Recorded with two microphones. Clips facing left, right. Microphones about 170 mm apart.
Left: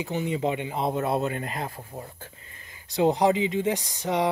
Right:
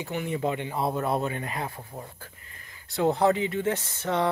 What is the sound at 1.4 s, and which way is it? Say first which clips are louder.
Speech: left 1 dB; 40° left (ahead or behind).